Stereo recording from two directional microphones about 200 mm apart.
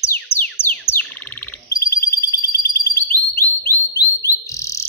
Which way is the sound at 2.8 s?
15° left (ahead or behind).